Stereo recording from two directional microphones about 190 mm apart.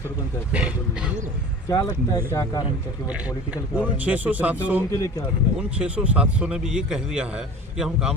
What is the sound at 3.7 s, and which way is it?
Speech, 5° right (ahead or behind).